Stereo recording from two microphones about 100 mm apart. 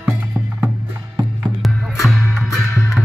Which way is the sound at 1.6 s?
Centre (ahead or behind).